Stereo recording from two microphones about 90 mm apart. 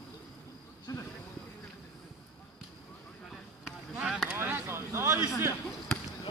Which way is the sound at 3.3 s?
5° right (ahead or behind).